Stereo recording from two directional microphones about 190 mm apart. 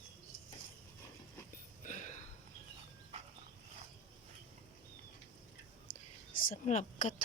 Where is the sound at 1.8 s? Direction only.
40° left (ahead or behind).